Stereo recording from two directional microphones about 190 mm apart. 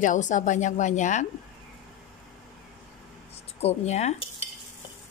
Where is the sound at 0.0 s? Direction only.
40° left (ahead or behind).